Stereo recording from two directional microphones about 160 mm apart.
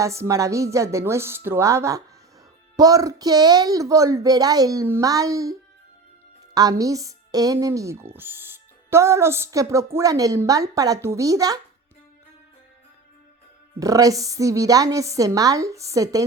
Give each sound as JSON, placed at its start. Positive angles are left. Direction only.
{"t": 0.0, "sound": "speech", "side_deg": -20}
{"t": 13.7, "sound": "speech", "side_deg": -20}